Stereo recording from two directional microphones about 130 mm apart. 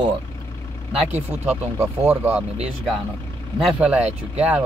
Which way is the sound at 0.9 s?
10° right (ahead or behind).